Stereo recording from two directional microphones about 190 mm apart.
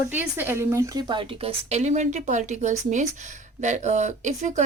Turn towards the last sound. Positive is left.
turn(degrees=-40)  # may be behind; listen again after turning